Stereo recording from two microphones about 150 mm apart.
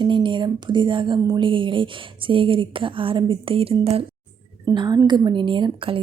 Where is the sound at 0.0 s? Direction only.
30° right (ahead or behind).